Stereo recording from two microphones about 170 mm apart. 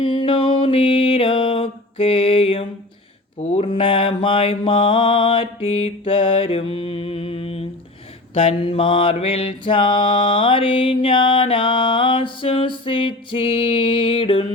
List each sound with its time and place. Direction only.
0.0 s music: 30° left (ahead or behind)
3.3 s mantra: 40° left (ahead or behind)